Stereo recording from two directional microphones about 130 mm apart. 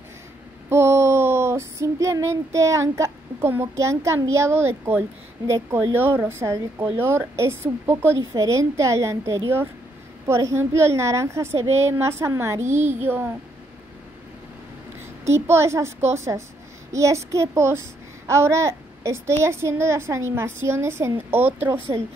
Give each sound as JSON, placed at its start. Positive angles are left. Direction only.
{"t": 0.7, "sound": "a child's voice", "side_deg": -20}
{"t": 15.3, "sound": "a child's voice", "side_deg": -20}